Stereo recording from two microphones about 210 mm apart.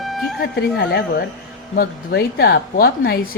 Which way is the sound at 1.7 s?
50° left (ahead or behind).